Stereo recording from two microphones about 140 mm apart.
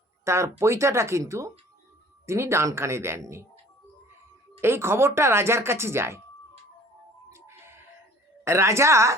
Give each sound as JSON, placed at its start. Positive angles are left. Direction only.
{"t": 0.3, "sound": "speech", "side_deg": -20}
{"t": 4.6, "sound": "speech", "side_deg": -15}
{"t": 7.3, "sound": "music", "side_deg": -20}
{"t": 8.4, "sound": "speech", "side_deg": -20}